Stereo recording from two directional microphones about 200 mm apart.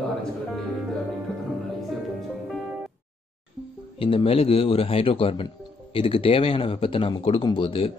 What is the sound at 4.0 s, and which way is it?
Speech, 25° left (ahead or behind).